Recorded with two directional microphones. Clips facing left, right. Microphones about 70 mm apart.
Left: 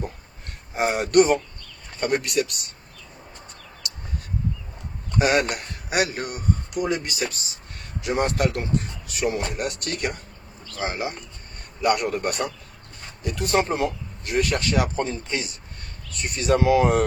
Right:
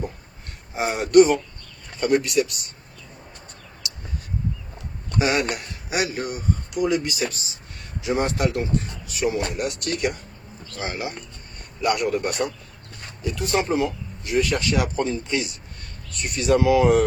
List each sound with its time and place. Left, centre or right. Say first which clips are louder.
0.8 s speech: right 3 dB; left
5.1 s speech: left 1 dB; left
11.8 s speech: even; left